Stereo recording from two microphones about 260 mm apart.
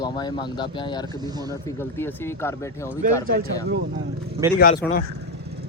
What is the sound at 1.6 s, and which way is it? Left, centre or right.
Speech, centre.